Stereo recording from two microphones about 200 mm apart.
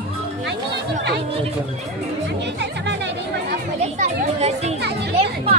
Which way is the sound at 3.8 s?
35° right (ahead or behind).